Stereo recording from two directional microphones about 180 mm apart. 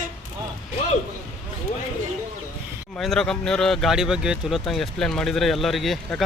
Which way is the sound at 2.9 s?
Centre (ahead or behind).